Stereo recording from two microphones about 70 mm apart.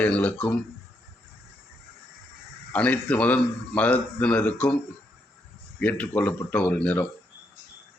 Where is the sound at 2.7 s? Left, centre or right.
Centre.